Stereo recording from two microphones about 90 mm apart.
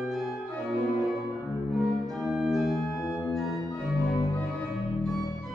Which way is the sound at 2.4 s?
Centre (ahead or behind).